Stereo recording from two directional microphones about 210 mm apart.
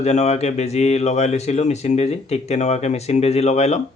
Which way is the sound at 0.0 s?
30° left (ahead or behind).